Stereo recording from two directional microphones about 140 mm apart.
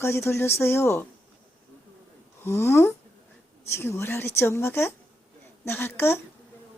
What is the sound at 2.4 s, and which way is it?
Speech, 15° left (ahead or behind).